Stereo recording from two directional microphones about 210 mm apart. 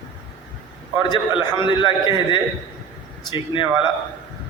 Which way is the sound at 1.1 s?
25° left (ahead or behind).